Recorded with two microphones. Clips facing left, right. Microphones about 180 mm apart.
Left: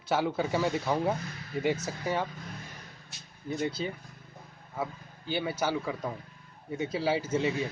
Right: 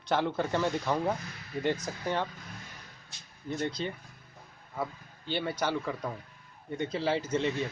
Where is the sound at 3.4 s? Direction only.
5° left (ahead or behind).